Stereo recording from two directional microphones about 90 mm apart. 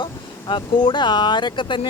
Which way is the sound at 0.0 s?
65° left (ahead or behind).